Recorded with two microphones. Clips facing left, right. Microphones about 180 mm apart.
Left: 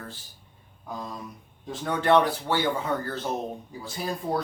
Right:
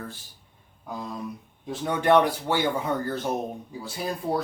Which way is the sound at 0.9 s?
10° right (ahead or behind).